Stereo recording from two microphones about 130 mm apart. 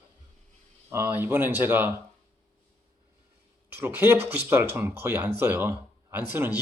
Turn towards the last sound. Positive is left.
turn(degrees=-15)  # may be behind; listen again after turning